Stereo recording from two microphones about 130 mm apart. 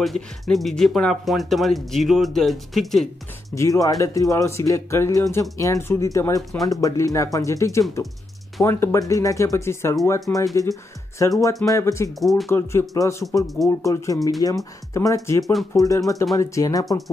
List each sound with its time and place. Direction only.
0.0 s speech: centre (ahead or behind)
3.5 s speech: 25° left (ahead or behind)
12.2 s speech: centre (ahead or behind)
12.4 s speech: 20° left (ahead or behind)
15.4 s speech: centre (ahead or behind)
15.8 s speech: 25° left (ahead or behind)